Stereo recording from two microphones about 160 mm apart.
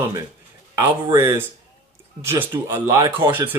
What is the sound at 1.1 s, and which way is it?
Speech, 20° right (ahead or behind).